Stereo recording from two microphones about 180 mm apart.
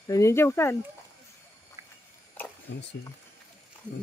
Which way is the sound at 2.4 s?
10° left (ahead or behind).